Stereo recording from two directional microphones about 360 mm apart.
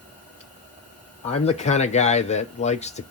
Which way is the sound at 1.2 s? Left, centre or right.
Centre.